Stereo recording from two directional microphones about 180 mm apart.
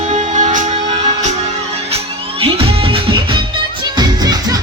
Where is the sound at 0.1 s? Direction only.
40° right (ahead or behind).